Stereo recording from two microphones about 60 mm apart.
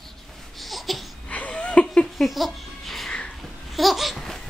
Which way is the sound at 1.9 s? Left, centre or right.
Centre.